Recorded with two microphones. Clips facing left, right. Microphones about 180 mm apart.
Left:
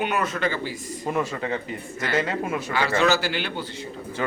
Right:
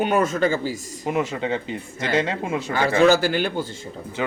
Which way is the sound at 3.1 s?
50° right (ahead or behind).